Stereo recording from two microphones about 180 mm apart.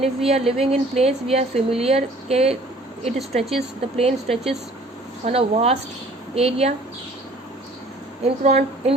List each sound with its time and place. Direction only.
0.0 s a woman's voice: 35° right (ahead or behind)
8.2 s a woman's voice: 35° right (ahead or behind)